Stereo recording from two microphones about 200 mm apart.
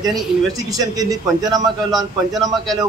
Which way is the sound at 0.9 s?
20° right (ahead or behind).